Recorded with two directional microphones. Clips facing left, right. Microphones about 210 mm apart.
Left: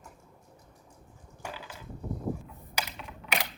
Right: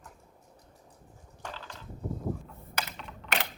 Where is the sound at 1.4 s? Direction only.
10° left (ahead or behind).